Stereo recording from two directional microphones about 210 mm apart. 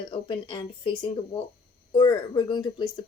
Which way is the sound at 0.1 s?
25° left (ahead or behind).